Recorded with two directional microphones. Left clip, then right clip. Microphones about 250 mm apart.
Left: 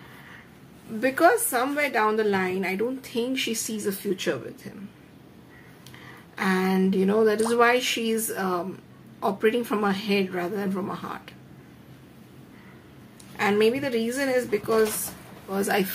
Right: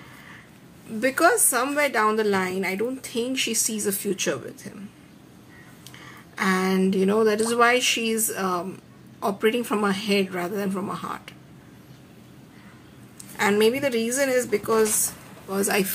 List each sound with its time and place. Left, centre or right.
1.0 s a woman's voice: centre
6.3 s a woman's voice: centre
13.4 s a woman's voice: centre